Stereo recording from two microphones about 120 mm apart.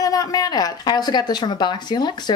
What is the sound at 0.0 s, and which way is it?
Speech, 30° left (ahead or behind).